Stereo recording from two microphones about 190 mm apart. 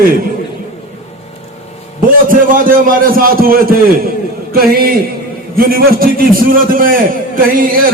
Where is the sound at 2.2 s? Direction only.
45° right (ahead or behind).